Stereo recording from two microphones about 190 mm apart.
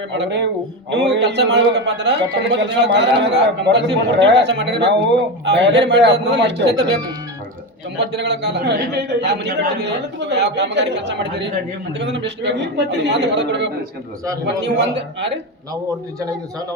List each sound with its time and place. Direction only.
0.1 s a man's voice: 65° right (ahead or behind)
7.9 s a man's voice: 65° right (ahead or behind)